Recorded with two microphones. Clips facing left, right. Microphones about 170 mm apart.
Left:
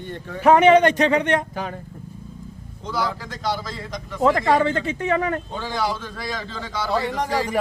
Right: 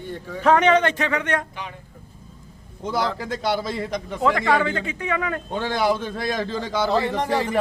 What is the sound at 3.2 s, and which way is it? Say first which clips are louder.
Speech: right 3 dB; 55° right (ahead or behind).